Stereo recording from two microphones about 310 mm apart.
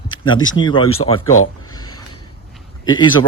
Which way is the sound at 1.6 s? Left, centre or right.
Centre.